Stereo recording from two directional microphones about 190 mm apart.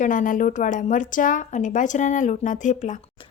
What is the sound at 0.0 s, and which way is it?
Speech, 45° left (ahead or behind).